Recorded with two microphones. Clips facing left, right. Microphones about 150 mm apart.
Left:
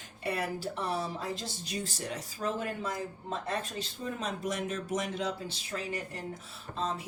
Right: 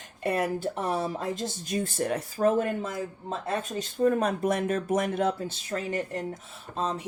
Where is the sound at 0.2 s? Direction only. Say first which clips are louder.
Right 6 dB; 45° right (ahead or behind).